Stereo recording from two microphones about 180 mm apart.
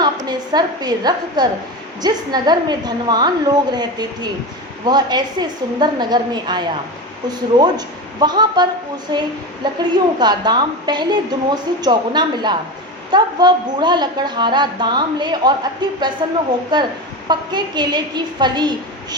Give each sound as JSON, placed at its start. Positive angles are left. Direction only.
{"t": 0.3, "sound": "a woman's voice", "side_deg": -25}